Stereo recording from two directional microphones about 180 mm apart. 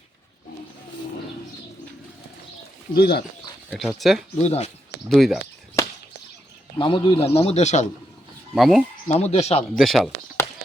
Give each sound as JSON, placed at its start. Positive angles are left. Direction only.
{"t": 2.9, "sound": "speech", "side_deg": 60}
{"t": 3.7, "sound": "speech", "side_deg": 0}
{"t": 4.4, "sound": "a man's voice", "side_deg": 35}
{"t": 5.0, "sound": "speech", "side_deg": 0}
{"t": 6.7, "sound": "a man's voice", "side_deg": 30}
{"t": 8.5, "sound": "speech", "side_deg": 0}
{"t": 9.0, "sound": "a man's voice", "side_deg": 35}
{"t": 9.7, "sound": "speech", "side_deg": 0}